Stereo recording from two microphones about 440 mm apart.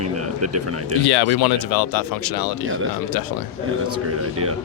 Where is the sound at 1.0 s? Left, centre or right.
Left.